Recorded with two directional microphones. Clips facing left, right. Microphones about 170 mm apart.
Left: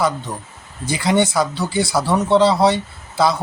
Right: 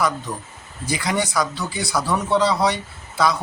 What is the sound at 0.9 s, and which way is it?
Speech, 25° left (ahead or behind).